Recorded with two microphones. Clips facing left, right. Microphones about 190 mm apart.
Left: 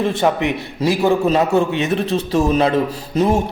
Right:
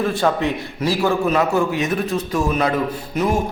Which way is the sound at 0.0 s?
20° left (ahead or behind).